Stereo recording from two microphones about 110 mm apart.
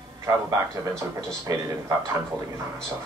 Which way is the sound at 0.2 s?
30° right (ahead or behind).